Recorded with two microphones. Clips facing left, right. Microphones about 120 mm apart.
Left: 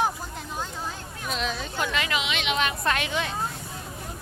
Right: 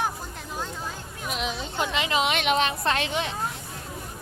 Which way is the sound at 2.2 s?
50° right (ahead or behind).